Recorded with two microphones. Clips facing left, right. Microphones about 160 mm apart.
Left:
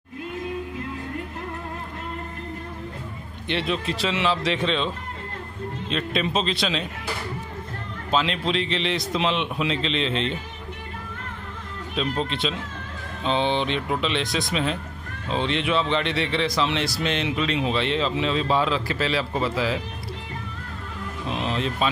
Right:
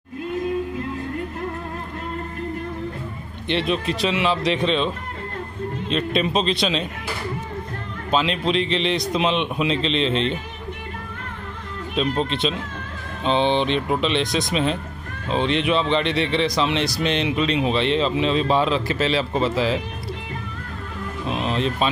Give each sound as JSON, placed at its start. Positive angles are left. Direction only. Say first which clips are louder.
{"t": 3.4, "sound": "speech", "louder": "right 3 dB", "side_deg": -20}
{"t": 8.1, "sound": "speech", "louder": "right 3 dB", "side_deg": -15}
{"t": 11.9, "sound": "speech", "louder": "right 4 dB", "side_deg": -20}
{"t": 21.3, "sound": "speech", "louder": "right 3 dB", "side_deg": -15}